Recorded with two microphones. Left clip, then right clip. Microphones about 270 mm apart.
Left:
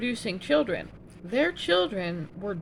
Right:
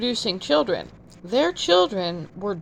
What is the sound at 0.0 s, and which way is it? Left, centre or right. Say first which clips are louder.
Speech: right 6 dB; centre.